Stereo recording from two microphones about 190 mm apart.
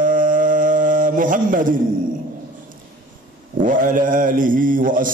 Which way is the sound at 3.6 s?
45° right (ahead or behind).